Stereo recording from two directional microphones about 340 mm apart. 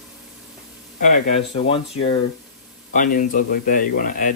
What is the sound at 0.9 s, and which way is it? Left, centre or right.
Speech, left.